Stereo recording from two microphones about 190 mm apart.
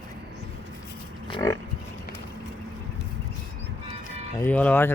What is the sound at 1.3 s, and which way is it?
Pig, 20° left (ahead or behind).